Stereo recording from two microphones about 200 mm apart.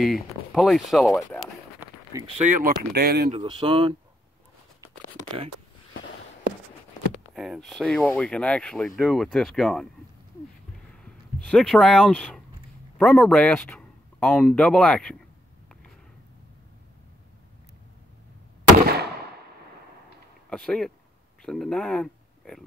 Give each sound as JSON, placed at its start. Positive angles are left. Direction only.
{"t": 0.0, "sound": "speech", "side_deg": 0}
{"t": 2.2, "sound": "speech", "side_deg": -35}
{"t": 3.3, "sound": "speech", "side_deg": -25}
{"t": 7.3, "sound": "speech", "side_deg": 0}
{"t": 11.1, "sound": "speech", "side_deg": 5}
{"t": 20.4, "sound": "speech", "side_deg": 5}